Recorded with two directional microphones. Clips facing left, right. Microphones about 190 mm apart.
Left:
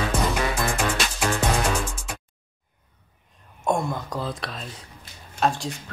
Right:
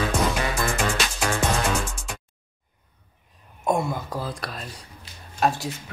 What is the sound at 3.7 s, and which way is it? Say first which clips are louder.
Speech: right 1 dB; centre (ahead or behind).